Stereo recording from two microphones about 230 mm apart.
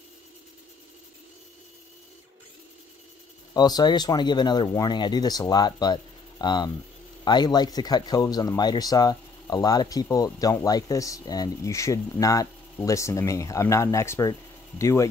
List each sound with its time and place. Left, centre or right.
3.5 s speech: centre